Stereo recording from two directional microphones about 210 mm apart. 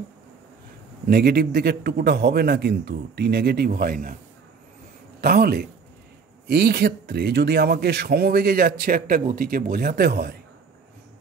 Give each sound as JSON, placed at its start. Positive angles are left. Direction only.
{"t": 1.0, "sound": "a man's voice", "side_deg": -45}
{"t": 5.2, "sound": "a man's voice", "side_deg": -45}